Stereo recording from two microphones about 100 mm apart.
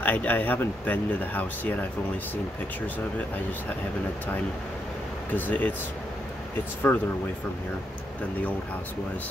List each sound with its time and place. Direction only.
0.0 s speech: 15° left (ahead or behind)
5.3 s speech: 15° left (ahead or behind)
6.9 s speech: 20° left (ahead or behind)